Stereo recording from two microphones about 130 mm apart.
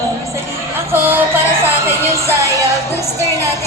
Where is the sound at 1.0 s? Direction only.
15° right (ahead or behind).